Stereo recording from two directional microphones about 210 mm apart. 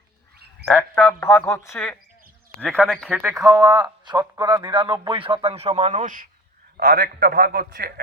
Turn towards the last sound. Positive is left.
turn(degrees=-45)  # may be behind; listen again after turning